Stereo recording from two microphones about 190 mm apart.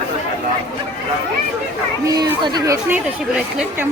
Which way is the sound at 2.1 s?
20° right (ahead or behind).